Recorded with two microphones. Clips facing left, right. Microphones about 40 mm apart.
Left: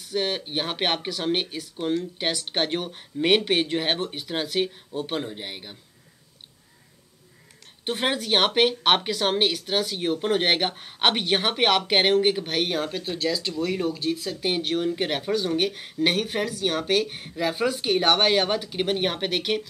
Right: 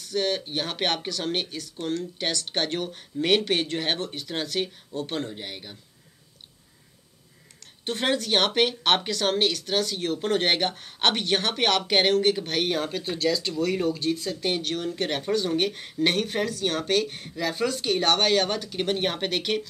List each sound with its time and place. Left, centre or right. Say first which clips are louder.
0.0 s speech: even; centre
7.8 s speech: even; centre